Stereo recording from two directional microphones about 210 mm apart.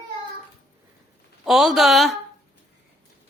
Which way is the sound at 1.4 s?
Centre (ahead or behind).